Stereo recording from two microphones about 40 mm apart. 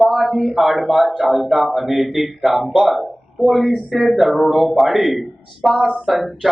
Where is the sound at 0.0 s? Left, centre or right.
Centre.